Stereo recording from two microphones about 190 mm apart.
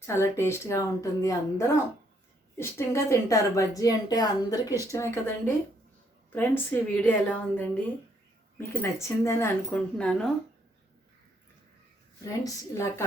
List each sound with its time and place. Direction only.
0.0 s a woman's voice: 15° left (ahead or behind)
6.3 s a woman's voice: 10° left (ahead or behind)
12.2 s a woman's voice: 15° left (ahead or behind)